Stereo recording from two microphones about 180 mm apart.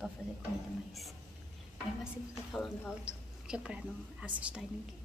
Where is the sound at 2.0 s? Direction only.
5° right (ahead or behind).